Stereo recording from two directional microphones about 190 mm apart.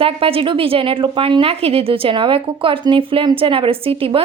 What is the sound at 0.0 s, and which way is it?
A woman's voice, 30° right (ahead or behind).